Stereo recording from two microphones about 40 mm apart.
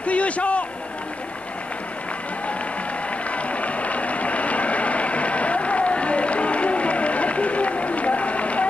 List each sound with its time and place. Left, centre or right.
0.0 s speech: left
3.3 s applause: left